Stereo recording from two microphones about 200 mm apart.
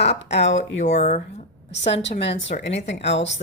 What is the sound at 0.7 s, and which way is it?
Speech, 35° left (ahead or behind).